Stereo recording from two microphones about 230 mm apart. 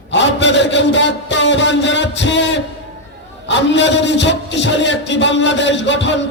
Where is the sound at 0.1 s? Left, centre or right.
Left.